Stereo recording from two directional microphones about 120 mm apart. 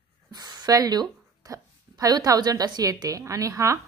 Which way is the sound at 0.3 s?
35° right (ahead or behind).